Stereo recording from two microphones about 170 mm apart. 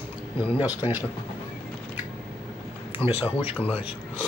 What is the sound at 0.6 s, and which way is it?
Speech, 10° right (ahead or behind).